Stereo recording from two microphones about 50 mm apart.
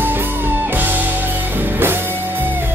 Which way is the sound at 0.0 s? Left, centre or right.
Right.